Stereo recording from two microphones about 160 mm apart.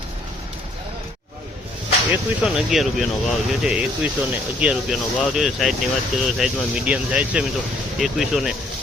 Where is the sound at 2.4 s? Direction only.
5° right (ahead or behind).